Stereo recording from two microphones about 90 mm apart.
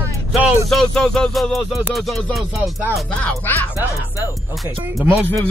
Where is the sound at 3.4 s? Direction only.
25° left (ahead or behind).